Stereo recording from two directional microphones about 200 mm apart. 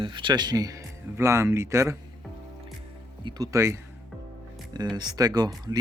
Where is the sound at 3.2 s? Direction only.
20° right (ahead or behind).